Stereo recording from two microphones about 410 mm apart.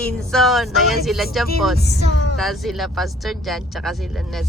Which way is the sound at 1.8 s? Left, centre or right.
Left.